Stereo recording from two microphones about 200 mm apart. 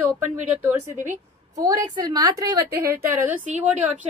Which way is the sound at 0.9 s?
40° right (ahead or behind).